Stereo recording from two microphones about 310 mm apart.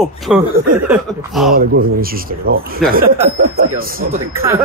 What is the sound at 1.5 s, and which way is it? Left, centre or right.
Speech, right.